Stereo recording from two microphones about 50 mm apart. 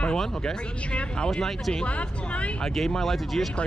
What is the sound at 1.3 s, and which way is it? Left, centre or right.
Speech, centre.